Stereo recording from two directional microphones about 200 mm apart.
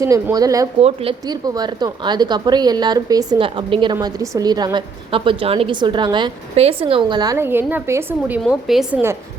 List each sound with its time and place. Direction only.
0.0 s speech: 15° right (ahead or behind)
0.8 s a woman's voice: 30° right (ahead or behind); by 9.1 s 10° right (ahead or behind)